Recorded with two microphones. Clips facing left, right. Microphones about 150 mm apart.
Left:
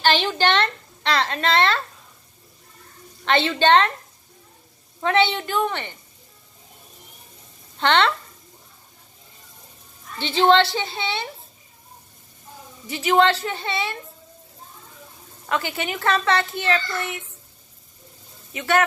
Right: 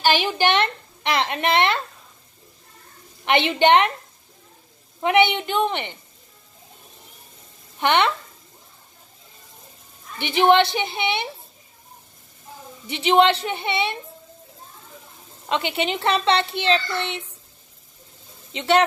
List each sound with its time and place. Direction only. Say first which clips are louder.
0.0 s a woman's voice: even; 10° right (ahead or behind)
3.3 s a woman's voice: right 1 dB; 15° right (ahead or behind)
5.0 s a woman's voice: right 2 dB; 15° right (ahead or behind)
7.8 s a woman's voice: even; 15° right (ahead or behind)
10.1 s a woman's voice: even; 15° right (ahead or behind)
12.8 s a woman's voice: right 1 dB; 20° right (ahead or behind)
15.4 s a woman's voice: right 2 dB; 20° right (ahead or behind)
18.5 s a woman's voice: right 2 dB; 25° right (ahead or behind)